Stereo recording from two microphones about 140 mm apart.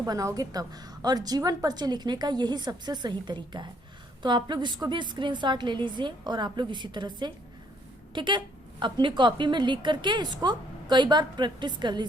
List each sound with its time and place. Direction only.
0.0 s a woman's voice: 25° right (ahead or behind)